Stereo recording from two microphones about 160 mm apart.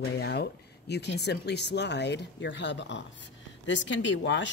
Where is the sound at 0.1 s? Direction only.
90° left.